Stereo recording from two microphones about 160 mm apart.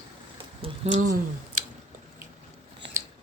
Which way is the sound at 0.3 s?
40° right (ahead or behind).